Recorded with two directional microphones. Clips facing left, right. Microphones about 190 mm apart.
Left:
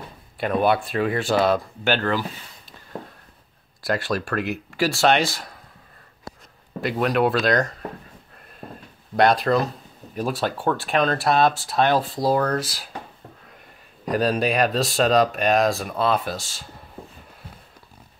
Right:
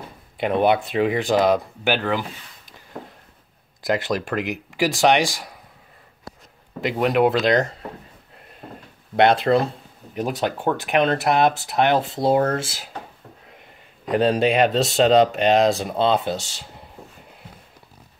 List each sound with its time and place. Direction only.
0.4 s speech: 20° right (ahead or behind)
3.8 s speech: 20° right (ahead or behind)
6.8 s speech: 20° right (ahead or behind)
9.1 s speech: 25° right (ahead or behind)
14.0 s speech: 25° right (ahead or behind)